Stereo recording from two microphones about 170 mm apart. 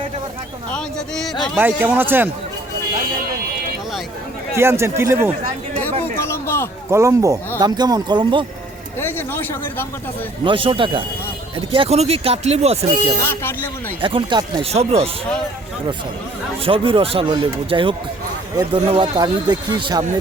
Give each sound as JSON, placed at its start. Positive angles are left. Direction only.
{"t": 0.7, "sound": "speech", "side_deg": 5}
{"t": 1.5, "sound": "speech", "side_deg": -10}
{"t": 4.5, "sound": "speech", "side_deg": -15}
{"t": 6.1, "sound": "a sound", "side_deg": 15}
{"t": 6.9, "sound": "a man's voice", "side_deg": -15}
{"t": 9.0, "sound": "speech", "side_deg": 10}
{"t": 10.4, "sound": "speech", "side_deg": -30}
{"t": 13.2, "sound": "speech", "side_deg": 10}
{"t": 14.0, "sound": "speech", "side_deg": -30}
{"t": 14.7, "sound": "speech", "side_deg": -40}
{"t": 16.6, "sound": "a man's voice", "side_deg": -30}